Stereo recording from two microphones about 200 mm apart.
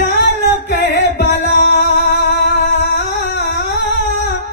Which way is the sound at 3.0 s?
55° left (ahead or behind).